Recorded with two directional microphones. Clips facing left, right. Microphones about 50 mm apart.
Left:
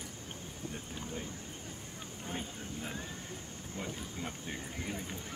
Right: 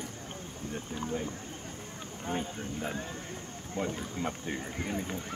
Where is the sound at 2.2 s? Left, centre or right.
Right.